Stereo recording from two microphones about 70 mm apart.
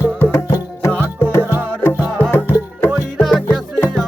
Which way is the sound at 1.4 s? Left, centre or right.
Right.